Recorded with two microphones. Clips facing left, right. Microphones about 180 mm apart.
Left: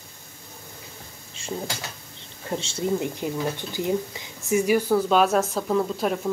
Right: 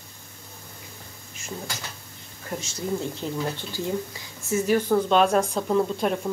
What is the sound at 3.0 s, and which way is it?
Speech, 15° left (ahead or behind).